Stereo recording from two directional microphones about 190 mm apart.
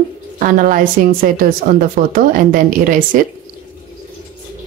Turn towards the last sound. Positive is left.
turn(degrees=-45)  # may be behind; listen again after turning